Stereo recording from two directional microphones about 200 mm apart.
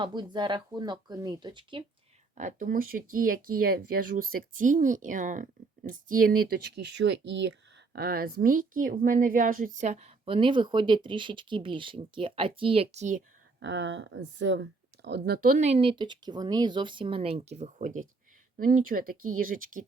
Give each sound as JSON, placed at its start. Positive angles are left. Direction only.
{"t": 0.0, "sound": "a woman's voice", "side_deg": -25}
{"t": 2.3, "sound": "speech", "side_deg": -40}
{"t": 7.9, "sound": "a woman's voice", "side_deg": -50}
{"t": 13.6, "sound": "speech", "side_deg": -60}
{"t": 15.5, "sound": "a woman's voice", "side_deg": -30}